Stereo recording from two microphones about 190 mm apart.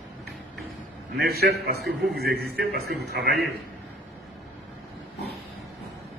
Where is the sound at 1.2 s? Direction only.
55° right (ahead or behind).